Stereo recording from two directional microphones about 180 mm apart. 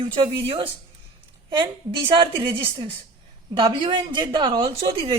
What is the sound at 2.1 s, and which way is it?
Speech, 25° right (ahead or behind).